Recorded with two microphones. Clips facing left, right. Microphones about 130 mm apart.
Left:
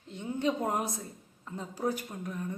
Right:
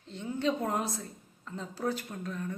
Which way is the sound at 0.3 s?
15° left (ahead or behind).